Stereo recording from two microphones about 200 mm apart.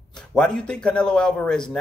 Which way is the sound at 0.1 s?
5° left (ahead or behind).